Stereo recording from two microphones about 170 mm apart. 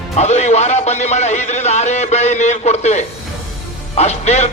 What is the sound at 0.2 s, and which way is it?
A man's voice, 40° left (ahead or behind).